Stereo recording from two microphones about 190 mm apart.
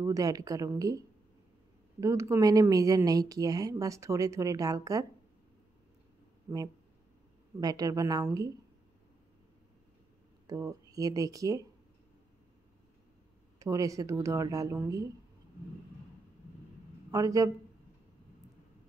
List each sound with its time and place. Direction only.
0.0 s speech: 20° right (ahead or behind)
7.6 s speech: 20° right (ahead or behind)
10.4 s speech: 15° right (ahead or behind)
13.6 s speech: 15° right (ahead or behind)
17.1 s a man's voice: 20° right (ahead or behind)